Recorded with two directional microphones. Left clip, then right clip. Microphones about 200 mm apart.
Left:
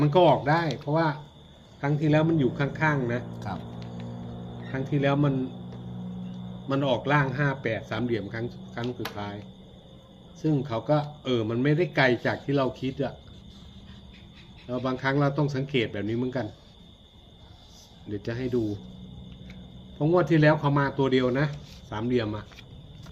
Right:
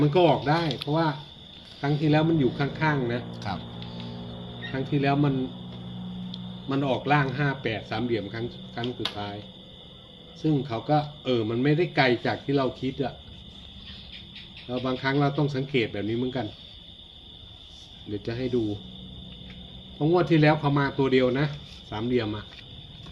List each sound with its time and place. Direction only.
0.0 s a man's voice: 10° left (ahead or behind)
3.5 s speech: 45° right (ahead or behind)
4.7 s a man's voice: 10° left (ahead or behind)
6.7 s a man's voice: 5° left (ahead or behind)
10.4 s a man's voice: 10° left (ahead or behind)
14.7 s a man's voice: 10° left (ahead or behind)
18.1 s a man's voice: 10° left (ahead or behind)
20.0 s a man's voice: 10° left (ahead or behind)